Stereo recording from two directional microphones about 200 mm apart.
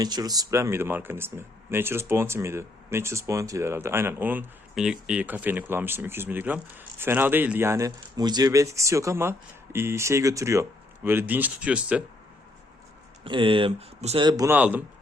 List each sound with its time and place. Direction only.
0.0 s speech: 20° right (ahead or behind)
13.2 s speech: 25° right (ahead or behind); by 14.8 s 10° right (ahead or behind)